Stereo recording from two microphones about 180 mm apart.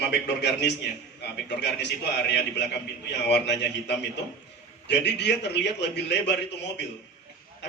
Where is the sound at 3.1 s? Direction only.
70° left (ahead or behind).